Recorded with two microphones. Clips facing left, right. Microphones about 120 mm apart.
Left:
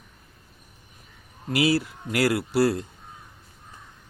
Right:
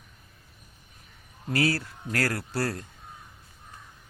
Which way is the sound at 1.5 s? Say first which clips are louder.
Left 4 dB; 10° left (ahead or behind).